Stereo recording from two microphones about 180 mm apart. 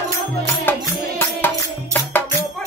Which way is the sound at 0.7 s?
10° left (ahead or behind).